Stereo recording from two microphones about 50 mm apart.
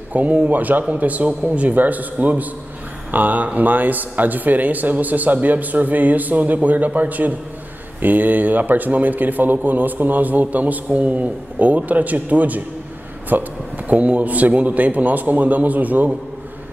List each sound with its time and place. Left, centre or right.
0.1 s a man's voice: right